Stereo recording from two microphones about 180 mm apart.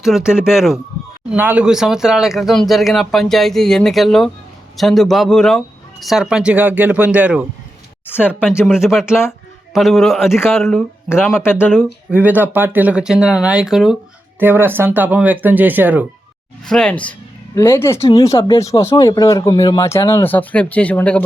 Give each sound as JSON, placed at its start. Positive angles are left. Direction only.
{"t": 0.0, "sound": "speech", "side_deg": -5}
{"t": 8.0, "sound": "speech", "side_deg": 10}
{"t": 8.9, "sound": "speech", "side_deg": 0}
{"t": 11.3, "sound": "speech", "side_deg": 10}
{"t": 12.1, "sound": "speech", "side_deg": -10}
{"t": 16.6, "sound": "speech", "side_deg": 5}